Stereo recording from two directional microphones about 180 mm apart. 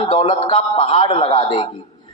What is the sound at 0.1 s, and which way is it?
Speech, 30° left (ahead or behind).